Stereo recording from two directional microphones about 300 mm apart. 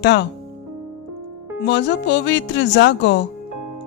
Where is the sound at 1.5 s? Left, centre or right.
Left.